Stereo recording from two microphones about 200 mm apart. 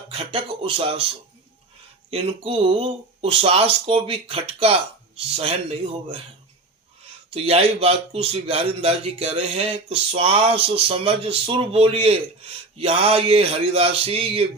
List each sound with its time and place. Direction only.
0.1 s a man's voice: 25° right (ahead or behind)
2.0 s a man's voice: 30° right (ahead or behind)
7.3 s a man's voice: 30° right (ahead or behind)